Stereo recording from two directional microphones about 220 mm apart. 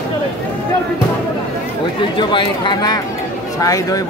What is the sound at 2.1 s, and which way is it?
Speech, 20° left (ahead or behind).